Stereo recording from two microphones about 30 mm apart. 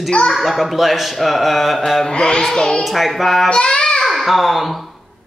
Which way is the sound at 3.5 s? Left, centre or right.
Left.